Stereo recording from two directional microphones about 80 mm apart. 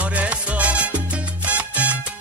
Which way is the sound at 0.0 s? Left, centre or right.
Centre.